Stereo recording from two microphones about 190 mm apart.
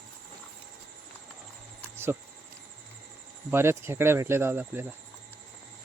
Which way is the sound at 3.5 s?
15° right (ahead or behind).